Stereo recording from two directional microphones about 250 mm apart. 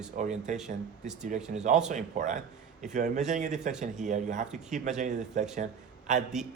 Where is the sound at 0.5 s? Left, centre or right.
Centre.